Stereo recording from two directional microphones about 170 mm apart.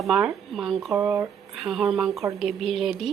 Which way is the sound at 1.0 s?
15° right (ahead or behind).